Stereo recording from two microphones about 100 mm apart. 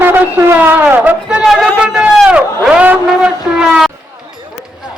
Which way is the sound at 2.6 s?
15° right (ahead or behind).